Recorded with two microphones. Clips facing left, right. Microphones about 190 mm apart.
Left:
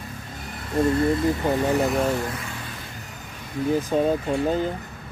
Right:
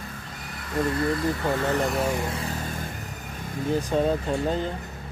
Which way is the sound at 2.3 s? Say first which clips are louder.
Right 3 dB; 40° right (ahead or behind).